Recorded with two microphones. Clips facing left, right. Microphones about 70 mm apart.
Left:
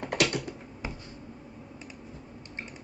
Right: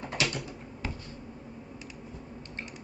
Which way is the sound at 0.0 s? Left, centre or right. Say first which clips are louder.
Left 4 dB; left.